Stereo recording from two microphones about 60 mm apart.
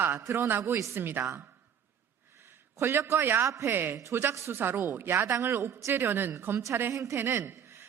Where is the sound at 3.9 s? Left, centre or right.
Right.